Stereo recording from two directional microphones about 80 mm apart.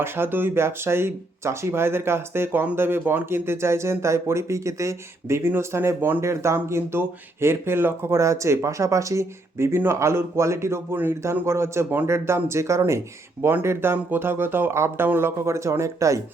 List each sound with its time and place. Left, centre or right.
0.0 s speech: right